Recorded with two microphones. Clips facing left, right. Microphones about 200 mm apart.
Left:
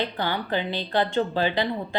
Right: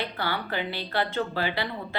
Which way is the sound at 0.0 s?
20° left (ahead or behind).